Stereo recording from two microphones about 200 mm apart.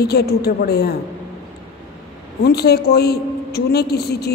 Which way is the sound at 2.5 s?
55° left (ahead or behind).